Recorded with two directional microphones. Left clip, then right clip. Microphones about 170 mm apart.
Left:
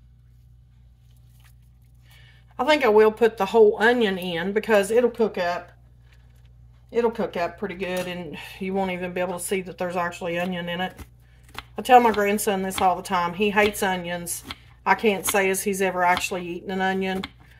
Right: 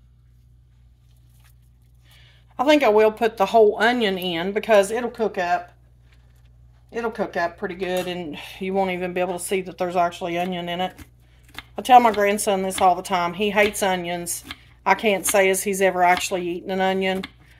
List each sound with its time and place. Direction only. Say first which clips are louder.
2.2 s speech: right 2 dB; 40° right (ahead or behind)
7.0 s a woman's voice: left 1 dB; 35° right (ahead or behind)